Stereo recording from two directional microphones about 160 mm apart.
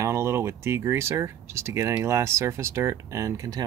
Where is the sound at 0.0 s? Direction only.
15° right (ahead or behind).